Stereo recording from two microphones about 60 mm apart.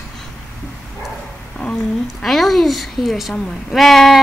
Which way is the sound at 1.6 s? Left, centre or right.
Centre.